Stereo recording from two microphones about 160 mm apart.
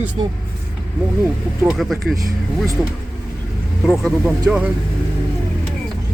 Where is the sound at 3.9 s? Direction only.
5° right (ahead or behind).